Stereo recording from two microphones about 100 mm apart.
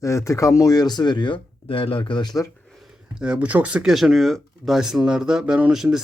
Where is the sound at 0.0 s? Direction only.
30° left (ahead or behind).